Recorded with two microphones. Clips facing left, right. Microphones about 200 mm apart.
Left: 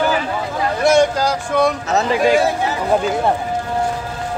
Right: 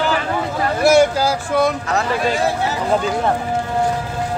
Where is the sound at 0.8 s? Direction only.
5° right (ahead or behind).